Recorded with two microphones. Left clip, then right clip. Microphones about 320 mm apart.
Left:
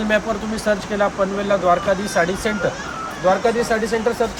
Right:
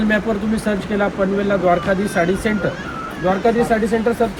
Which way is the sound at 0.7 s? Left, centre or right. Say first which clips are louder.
Left 2 dB; centre.